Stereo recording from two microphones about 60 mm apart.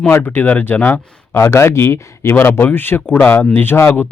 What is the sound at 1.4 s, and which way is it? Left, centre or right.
Speech, left.